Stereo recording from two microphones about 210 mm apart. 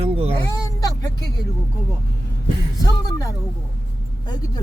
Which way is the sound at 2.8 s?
15° left (ahead or behind).